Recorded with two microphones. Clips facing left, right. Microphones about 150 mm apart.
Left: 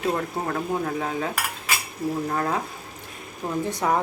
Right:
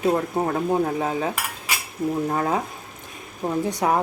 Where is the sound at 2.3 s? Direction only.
20° right (ahead or behind).